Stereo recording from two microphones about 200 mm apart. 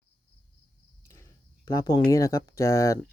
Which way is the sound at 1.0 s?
15° left (ahead or behind).